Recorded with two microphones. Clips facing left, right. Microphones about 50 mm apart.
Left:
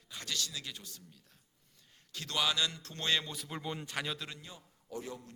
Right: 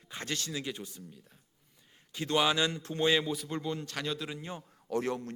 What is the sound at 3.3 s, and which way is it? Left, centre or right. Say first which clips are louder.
Speech: right 5 dB; centre.